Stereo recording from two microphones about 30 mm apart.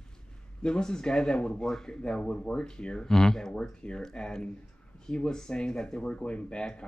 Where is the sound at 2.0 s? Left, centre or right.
Left.